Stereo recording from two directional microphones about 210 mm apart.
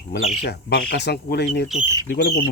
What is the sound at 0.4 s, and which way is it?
Speech, 55° left (ahead or behind).